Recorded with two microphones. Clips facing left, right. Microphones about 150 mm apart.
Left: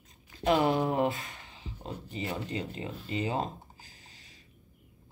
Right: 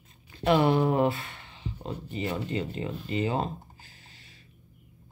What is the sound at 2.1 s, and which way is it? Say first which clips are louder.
Speech: right 4 dB; 40° right (ahead or behind).